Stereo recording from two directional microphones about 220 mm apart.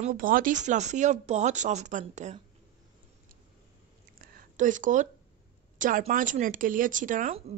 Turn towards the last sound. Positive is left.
turn(degrees=-35)  # may be behind; listen again after turning